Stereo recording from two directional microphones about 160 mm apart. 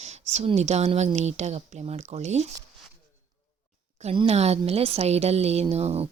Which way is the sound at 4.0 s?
40° right (ahead or behind).